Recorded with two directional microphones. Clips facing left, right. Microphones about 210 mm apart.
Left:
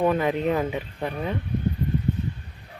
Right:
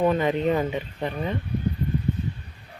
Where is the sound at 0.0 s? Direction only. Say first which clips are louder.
Right 1 dB; 5° left (ahead or behind).